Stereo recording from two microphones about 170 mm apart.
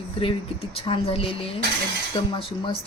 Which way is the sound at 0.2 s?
35° left (ahead or behind).